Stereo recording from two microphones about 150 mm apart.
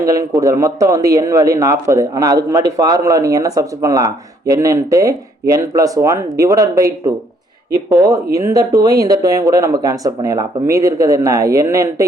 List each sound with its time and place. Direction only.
0.0 s a man's voice: 20° right (ahead or behind)